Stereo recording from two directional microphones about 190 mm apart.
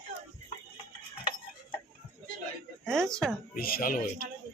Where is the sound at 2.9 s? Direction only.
5° left (ahead or behind).